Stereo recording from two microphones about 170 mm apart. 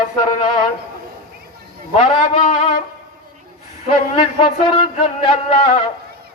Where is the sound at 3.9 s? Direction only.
30° left (ahead or behind).